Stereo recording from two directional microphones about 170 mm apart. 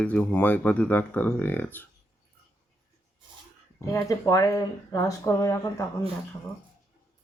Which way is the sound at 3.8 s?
20° left (ahead or behind).